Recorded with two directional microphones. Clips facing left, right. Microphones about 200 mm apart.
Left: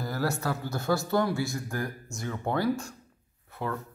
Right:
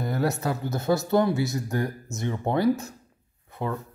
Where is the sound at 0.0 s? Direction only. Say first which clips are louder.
Right 4 dB; 20° right (ahead or behind).